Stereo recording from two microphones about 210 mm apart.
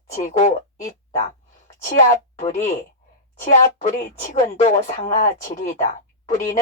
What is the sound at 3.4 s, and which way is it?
A woman's voice, 35° left (ahead or behind).